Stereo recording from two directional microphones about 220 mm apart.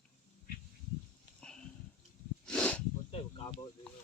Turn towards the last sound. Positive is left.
turn(degrees=25)  # may be behind; listen again after turning